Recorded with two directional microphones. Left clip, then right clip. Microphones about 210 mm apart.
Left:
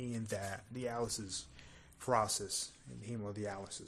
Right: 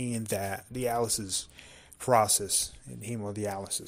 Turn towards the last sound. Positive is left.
turn(degrees=-30)  # may be behind; listen again after turning